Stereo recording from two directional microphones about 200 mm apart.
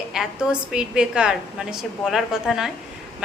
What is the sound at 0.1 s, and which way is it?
A woman's voice, 5° right (ahead or behind).